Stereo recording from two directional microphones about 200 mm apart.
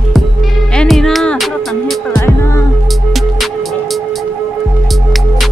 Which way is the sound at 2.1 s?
15° left (ahead or behind).